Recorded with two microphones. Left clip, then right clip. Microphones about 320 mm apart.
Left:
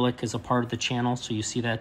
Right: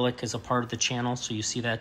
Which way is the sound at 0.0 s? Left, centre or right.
Centre.